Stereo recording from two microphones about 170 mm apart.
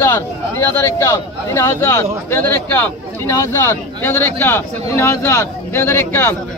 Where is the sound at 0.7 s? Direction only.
15° left (ahead or behind).